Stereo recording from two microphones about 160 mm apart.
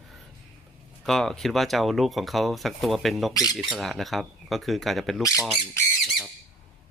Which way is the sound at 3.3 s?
25° left (ahead or behind).